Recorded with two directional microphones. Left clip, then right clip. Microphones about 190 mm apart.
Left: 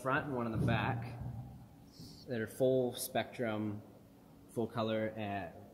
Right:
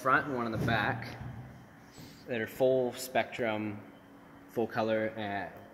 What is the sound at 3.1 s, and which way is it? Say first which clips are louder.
Speech: right 6 dB; 15° left (ahead or behind).